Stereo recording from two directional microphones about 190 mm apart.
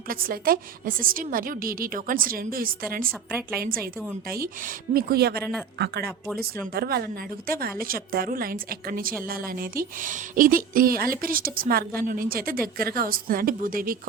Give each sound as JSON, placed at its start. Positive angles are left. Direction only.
{"t": 0.1, "sound": "a woman's voice", "side_deg": -50}
{"t": 4.9, "sound": "speech", "side_deg": -55}
{"t": 6.2, "sound": "speech", "side_deg": 0}
{"t": 6.7, "sound": "a woman's voice", "side_deg": -55}